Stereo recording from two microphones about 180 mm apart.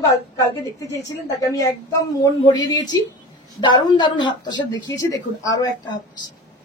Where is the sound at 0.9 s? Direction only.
15° left (ahead or behind).